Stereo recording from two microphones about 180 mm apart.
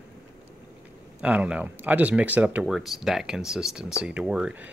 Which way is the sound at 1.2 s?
5° right (ahead or behind).